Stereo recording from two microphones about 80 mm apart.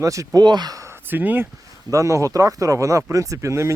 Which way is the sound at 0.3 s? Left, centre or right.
Right.